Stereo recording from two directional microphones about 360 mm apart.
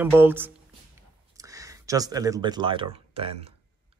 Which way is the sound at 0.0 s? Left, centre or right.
Centre.